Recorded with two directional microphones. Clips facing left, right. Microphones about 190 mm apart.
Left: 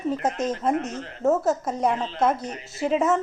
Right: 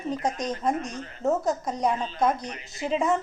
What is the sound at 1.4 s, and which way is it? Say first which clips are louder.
Speech: left 3 dB; 5° left (ahead or behind).